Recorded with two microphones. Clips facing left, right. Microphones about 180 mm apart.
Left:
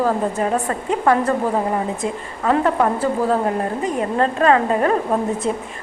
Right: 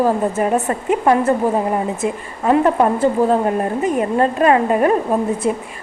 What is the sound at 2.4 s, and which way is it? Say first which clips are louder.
A woman's voice: right 3 dB; 20° right (ahead or behind).